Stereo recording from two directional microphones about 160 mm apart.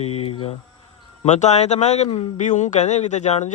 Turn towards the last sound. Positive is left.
turn(degrees=45)  # may be behind; listen again after turning